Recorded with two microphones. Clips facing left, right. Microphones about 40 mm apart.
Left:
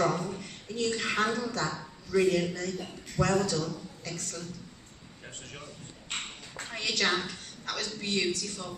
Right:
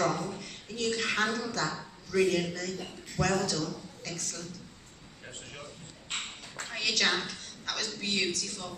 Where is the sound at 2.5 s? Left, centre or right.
Centre.